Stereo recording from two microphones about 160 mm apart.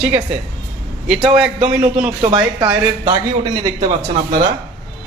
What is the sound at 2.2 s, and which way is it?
A man's voice, 30° right (ahead or behind).